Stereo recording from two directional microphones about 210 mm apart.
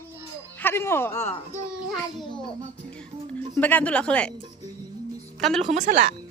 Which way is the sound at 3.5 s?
5° left (ahead or behind).